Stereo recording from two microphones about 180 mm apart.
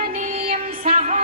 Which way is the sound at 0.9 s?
40° right (ahead or behind).